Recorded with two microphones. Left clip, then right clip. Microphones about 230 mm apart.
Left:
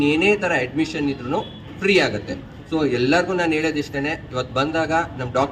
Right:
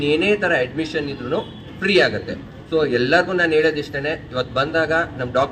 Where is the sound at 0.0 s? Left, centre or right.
Left.